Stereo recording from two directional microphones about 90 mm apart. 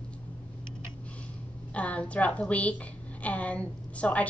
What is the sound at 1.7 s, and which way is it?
A woman's voice, 15° left (ahead or behind).